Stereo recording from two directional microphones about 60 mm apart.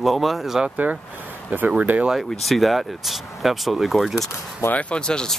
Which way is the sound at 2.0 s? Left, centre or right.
Centre.